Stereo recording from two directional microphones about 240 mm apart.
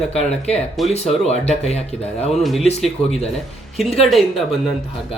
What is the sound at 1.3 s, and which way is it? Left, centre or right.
Speech, left.